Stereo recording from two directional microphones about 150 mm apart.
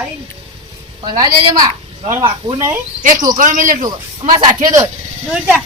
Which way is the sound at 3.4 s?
60° right (ahead or behind).